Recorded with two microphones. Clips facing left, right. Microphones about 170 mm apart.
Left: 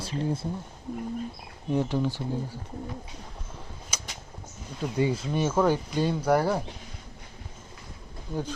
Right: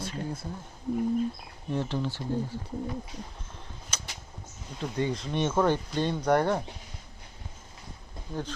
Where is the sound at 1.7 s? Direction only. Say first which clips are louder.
Left 4 dB; 15° left (ahead or behind).